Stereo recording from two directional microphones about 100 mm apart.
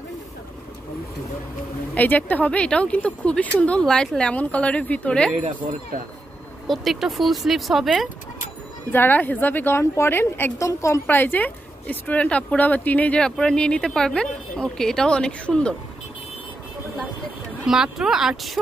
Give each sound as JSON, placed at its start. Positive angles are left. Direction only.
{"t": 2.0, "sound": "speech", "side_deg": 15}
{"t": 6.7, "sound": "speech", "side_deg": 0}
{"t": 8.9, "sound": "a woman's voice", "side_deg": 20}
{"t": 11.1, "sound": "speech", "side_deg": 20}
{"t": 17.6, "sound": "speech", "side_deg": -5}